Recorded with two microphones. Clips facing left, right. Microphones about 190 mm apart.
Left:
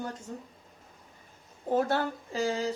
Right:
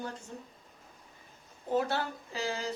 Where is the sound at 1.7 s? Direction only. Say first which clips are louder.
Left 3 dB; 50° left (ahead or behind).